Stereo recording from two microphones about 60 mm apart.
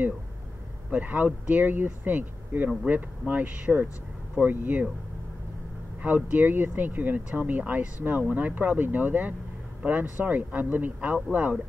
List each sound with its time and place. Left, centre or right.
0.8 s speech: right
6.0 s speech: right